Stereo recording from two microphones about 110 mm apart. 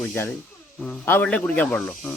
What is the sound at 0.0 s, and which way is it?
Speech, 20° left (ahead or behind).